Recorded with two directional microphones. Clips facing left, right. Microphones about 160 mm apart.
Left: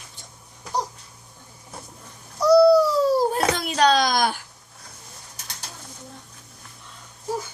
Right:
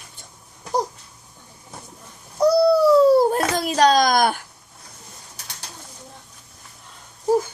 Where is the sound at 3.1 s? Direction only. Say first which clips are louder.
Right 5 dB; 55° right (ahead or behind).